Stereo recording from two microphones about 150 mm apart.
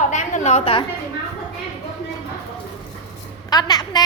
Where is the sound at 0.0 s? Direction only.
55° left (ahead or behind); by 0.9 s 35° left (ahead or behind).